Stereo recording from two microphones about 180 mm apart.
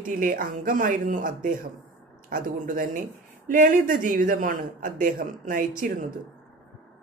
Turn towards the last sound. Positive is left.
turn(degrees=-50)  # may be behind; listen again after turning